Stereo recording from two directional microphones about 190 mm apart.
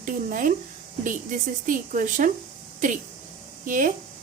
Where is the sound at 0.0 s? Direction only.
45° right (ahead or behind).